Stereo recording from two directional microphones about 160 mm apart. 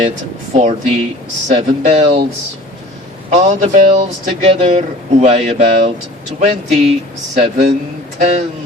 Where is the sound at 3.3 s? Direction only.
45° right (ahead or behind).